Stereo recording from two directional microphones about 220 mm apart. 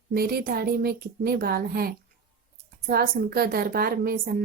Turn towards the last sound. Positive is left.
turn(degrees=-45)  # may be behind; listen again after turning